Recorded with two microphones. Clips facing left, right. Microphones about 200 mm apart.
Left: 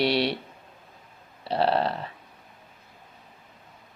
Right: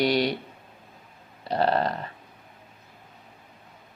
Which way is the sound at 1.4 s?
5° left (ahead or behind).